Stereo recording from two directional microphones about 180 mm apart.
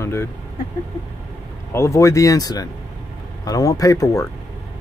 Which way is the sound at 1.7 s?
15° left (ahead or behind).